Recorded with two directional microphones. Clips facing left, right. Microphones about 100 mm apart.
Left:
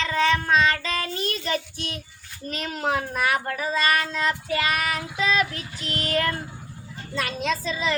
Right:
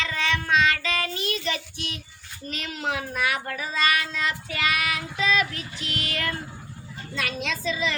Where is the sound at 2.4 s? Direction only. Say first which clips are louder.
Left 3 dB; 40° left (ahead or behind).